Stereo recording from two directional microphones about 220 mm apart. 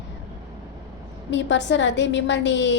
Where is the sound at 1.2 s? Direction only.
55° left (ahead or behind).